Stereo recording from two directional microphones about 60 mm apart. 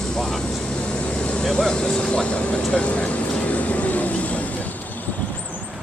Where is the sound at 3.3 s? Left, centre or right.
Left.